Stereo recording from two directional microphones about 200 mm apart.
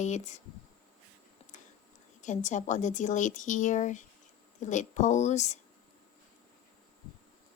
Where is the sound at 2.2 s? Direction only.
40° left (ahead or behind).